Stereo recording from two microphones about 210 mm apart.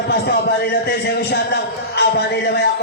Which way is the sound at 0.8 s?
50° left (ahead or behind).